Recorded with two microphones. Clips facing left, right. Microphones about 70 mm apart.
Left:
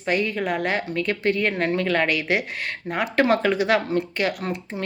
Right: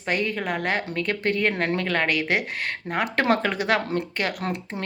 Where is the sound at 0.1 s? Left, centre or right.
Right.